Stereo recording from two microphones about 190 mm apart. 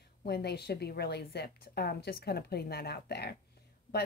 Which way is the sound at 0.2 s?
60° left (ahead or behind).